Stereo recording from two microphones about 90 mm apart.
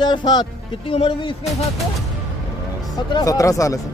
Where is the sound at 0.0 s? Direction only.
55° left (ahead or behind).